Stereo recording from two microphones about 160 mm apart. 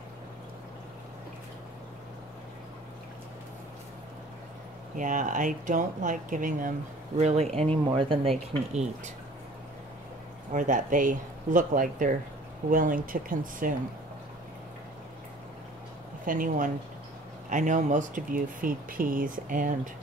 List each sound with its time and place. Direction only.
4.9 s speech: 55° right (ahead or behind)
7.2 s speech: 45° right (ahead or behind)
10.5 s speech: 55° right (ahead or behind)
16.3 s speech: 55° right (ahead or behind)